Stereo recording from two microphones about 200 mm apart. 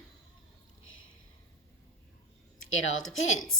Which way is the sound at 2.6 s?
75° left (ahead or behind).